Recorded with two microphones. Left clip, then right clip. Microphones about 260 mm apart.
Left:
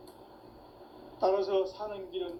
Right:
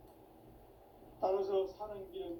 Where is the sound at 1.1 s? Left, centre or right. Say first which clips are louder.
Left 6 dB; left.